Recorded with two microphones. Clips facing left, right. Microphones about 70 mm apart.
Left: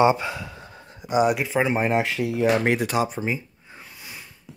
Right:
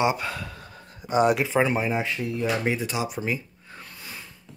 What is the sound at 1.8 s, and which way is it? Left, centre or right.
Speech, left.